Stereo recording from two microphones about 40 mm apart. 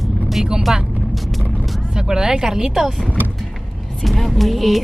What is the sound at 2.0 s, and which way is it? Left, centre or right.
Speech, centre.